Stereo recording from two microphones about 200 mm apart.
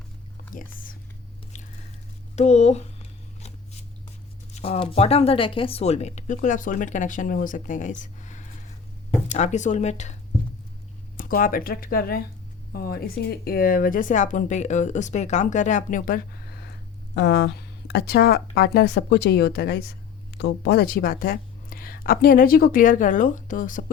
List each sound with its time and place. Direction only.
0.5 s speech: 45° left (ahead or behind)
1.5 s biting: 35° left (ahead or behind)
2.3 s a sound: 35° left (ahead or behind)
4.5 s speech: 30° left (ahead or behind)
11.2 s a woman's voice: 45° left (ahead or behind)
17.2 s a woman's voice: 60° left (ahead or behind); by 23.8 s 40° left (ahead or behind)